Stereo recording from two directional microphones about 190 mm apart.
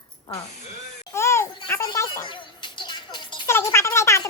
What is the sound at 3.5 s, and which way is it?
Speech, 15° left (ahead or behind).